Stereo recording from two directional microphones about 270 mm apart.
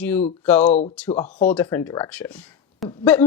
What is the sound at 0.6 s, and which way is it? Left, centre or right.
Speech, left.